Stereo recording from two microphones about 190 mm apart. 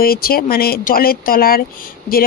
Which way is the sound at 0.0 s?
50° left (ahead or behind).